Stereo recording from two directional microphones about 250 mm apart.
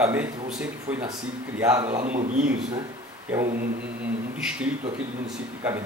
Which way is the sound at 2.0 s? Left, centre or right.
Right.